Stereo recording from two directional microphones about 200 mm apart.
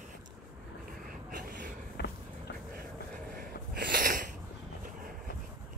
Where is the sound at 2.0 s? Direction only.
55° left (ahead or behind).